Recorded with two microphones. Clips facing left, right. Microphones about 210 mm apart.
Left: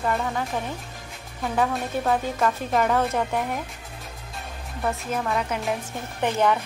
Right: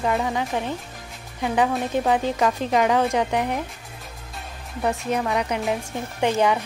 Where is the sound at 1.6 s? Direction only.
Centre (ahead or behind).